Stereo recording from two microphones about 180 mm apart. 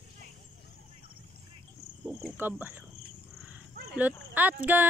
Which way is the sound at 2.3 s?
10° right (ahead or behind).